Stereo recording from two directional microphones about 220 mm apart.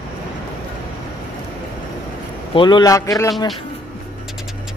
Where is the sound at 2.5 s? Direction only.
20° left (ahead or behind).